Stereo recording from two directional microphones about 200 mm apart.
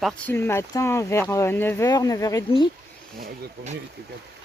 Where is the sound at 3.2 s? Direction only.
35° right (ahead or behind).